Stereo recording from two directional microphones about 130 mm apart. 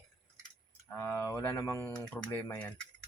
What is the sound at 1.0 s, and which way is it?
Speech, 15° left (ahead or behind).